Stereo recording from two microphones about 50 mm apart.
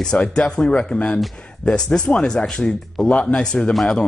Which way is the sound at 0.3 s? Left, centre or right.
Centre.